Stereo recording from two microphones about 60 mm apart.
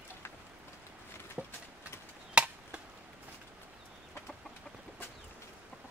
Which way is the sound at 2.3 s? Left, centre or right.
Centre.